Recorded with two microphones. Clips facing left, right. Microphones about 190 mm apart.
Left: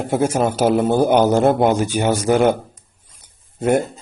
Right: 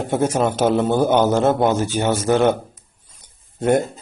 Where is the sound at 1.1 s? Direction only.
15° left (ahead or behind).